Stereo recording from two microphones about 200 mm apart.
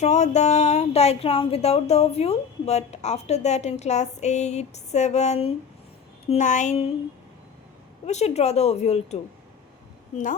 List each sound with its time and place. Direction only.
0.0 s speech: 35° left (ahead or behind)
8.0 s speech: 35° left (ahead or behind)